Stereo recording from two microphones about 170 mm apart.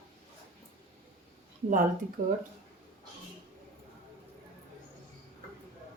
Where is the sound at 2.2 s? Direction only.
60° right (ahead or behind).